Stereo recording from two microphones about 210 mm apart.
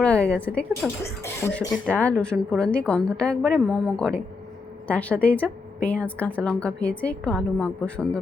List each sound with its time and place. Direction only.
0.0 s a woman's voice: 5° left (ahead or behind)